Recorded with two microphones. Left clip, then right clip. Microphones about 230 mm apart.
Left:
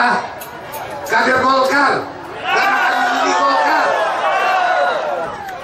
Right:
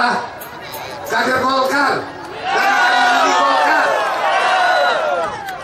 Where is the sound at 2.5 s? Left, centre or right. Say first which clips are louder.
Right 1 dB; centre.